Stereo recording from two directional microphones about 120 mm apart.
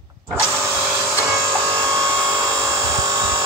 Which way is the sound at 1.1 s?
20° right (ahead or behind).